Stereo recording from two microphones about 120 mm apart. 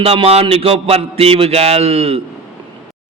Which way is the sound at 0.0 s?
55° right (ahead or behind).